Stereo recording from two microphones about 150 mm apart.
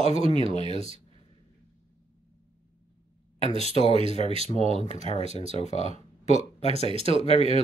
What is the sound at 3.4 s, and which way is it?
Speech, 40° right (ahead or behind).